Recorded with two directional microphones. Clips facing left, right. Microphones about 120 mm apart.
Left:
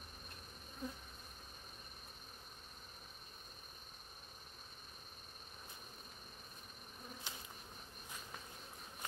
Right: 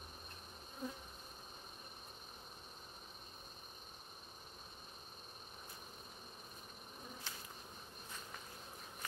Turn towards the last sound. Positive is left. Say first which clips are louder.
# even
turn(degrees=15)  # may be behind; listen again after turning